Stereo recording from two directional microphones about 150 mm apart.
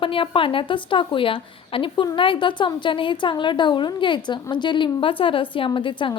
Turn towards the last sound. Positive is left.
turn(degrees=35)  # may be behind; listen again after turning